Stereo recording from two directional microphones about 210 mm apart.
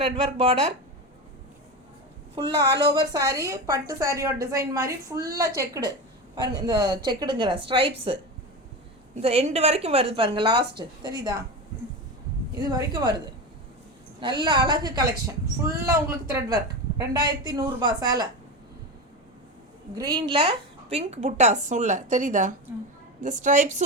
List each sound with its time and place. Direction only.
0.0 s a woman's voice: 25° right (ahead or behind)
2.4 s a woman's voice: 20° right (ahead or behind)
9.2 s a woman's voice: 30° right (ahead or behind)
12.6 s a woman's voice: 20° right (ahead or behind)
20.0 s a woman's voice: 20° right (ahead or behind); by 23.8 s 35° right (ahead or behind)